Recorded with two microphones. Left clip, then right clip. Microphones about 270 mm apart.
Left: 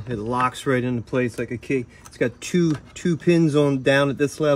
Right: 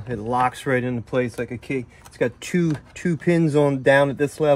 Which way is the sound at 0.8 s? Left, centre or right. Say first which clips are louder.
Even; centre.